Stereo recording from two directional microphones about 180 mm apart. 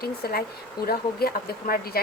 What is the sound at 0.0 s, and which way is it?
Speech, 60° left (ahead or behind).